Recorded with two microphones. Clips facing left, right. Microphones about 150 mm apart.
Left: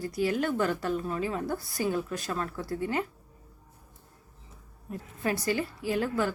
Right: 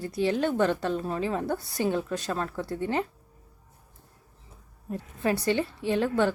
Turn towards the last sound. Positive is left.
turn(degrees=-25)  # may be behind; listen again after turning